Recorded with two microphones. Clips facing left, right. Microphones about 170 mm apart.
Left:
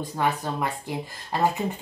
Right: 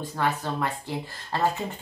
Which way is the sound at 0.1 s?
15° left (ahead or behind).